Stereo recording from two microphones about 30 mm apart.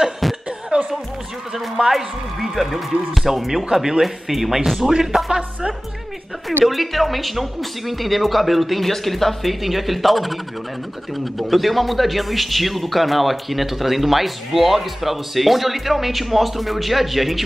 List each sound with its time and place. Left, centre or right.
0.2 s chuckle: centre
0.7 s music: right
1.8 s a man's voice: right
2.5 s speech: centre
6.6 s speech: centre